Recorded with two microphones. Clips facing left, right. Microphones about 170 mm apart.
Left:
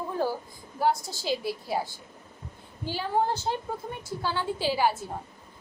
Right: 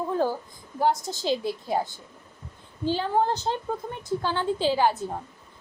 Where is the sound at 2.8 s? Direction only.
10° left (ahead or behind).